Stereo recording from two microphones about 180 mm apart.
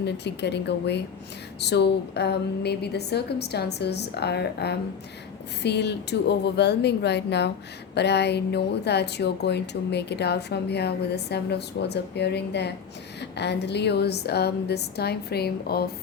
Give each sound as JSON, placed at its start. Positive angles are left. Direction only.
{"t": 0.0, "sound": "a woman's voice", "side_deg": 70}